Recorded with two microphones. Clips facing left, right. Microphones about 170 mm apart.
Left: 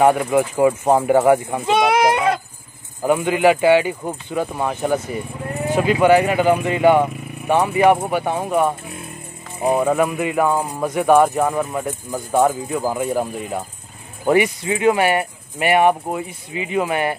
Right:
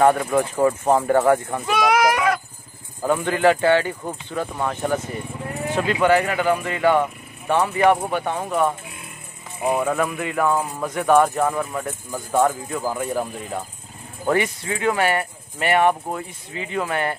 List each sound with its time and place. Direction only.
0.0 s speech: 10° left (ahead or behind)
1.7 s speech: 25° left (ahead or behind)
3.0 s speech: 15° left (ahead or behind)
9.8 s speech: 15° left (ahead or behind)
14.2 s speech: 15° left (ahead or behind)